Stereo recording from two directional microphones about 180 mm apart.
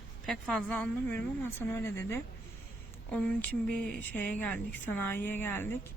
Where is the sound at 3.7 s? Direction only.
10° left (ahead or behind).